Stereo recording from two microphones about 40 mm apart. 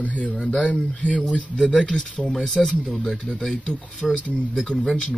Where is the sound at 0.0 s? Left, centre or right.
Left.